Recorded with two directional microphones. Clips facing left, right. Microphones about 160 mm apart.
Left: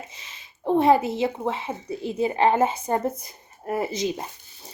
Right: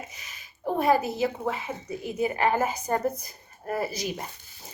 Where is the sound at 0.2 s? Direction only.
25° left (ahead or behind).